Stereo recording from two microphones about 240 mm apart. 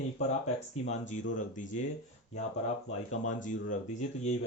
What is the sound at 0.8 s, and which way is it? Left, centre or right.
Speech, left.